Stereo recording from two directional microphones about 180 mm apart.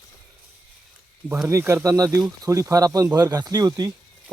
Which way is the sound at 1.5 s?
15° right (ahead or behind).